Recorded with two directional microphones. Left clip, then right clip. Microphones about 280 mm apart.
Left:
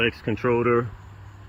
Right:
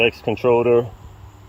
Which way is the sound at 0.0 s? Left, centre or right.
Centre.